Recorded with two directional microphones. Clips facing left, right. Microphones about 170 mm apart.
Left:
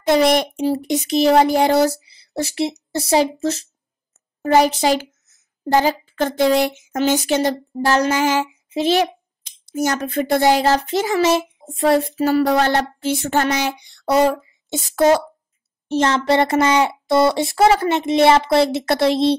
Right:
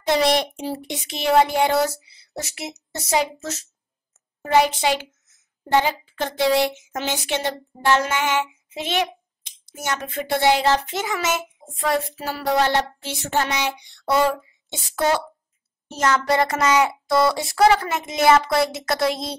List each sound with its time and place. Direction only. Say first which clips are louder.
0.1 s a woman's voice: left 4 dB; 50° left (ahead or behind); by 12.3 s 35° left (ahead or behind)
12.3 s child singing: left 5 dB; 50° left (ahead or behind)
15.9 s speech: left 4 dB; 30° left (ahead or behind)